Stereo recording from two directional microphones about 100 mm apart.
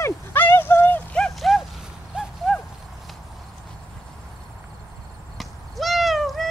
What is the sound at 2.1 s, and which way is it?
Horse, 10° right (ahead or behind).